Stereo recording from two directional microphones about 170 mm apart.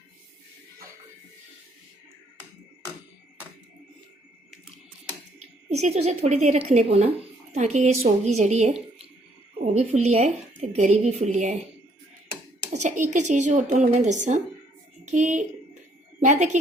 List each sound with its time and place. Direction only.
5.6 s speech: 40° right (ahead or behind)
12.8 s a woman's voice: 45° right (ahead or behind)